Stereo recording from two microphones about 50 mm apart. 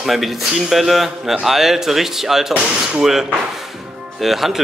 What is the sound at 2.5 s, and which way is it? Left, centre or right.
Speech, right.